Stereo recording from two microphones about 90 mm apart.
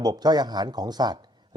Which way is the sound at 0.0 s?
50° right (ahead or behind).